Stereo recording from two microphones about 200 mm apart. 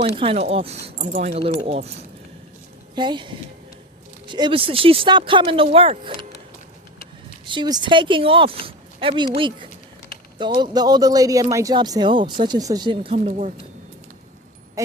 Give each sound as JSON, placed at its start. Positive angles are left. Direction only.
{"t": 0.2, "sound": "speech", "side_deg": -30}
{"t": 0.9, "sound": "speech", "side_deg": -40}
{"t": 2.9, "sound": "speech", "side_deg": -20}
{"t": 7.4, "sound": "speech", "side_deg": -20}
{"t": 13.1, "sound": "speech", "side_deg": -40}
{"t": 14.8, "sound": "a sound", "side_deg": -15}